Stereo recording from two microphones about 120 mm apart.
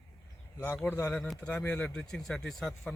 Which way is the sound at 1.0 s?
5° left (ahead or behind).